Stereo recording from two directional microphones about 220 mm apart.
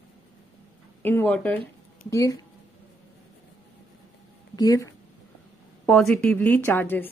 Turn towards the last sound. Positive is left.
turn(degrees=10)  # may be behind; listen again after turning